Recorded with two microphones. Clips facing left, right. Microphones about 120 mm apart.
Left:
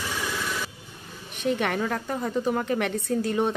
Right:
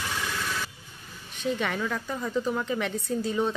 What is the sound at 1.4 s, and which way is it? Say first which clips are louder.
Speech: left 3 dB; 60° left (ahead or behind).